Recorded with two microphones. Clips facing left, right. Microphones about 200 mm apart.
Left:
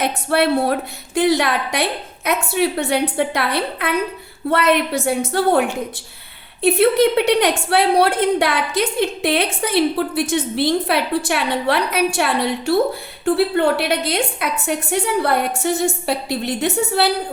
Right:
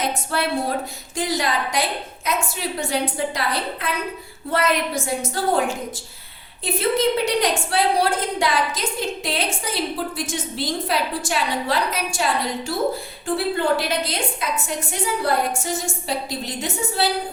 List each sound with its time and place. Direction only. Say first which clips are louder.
0.0 s a woman's voice: left 6 dB; 65° left (ahead or behind)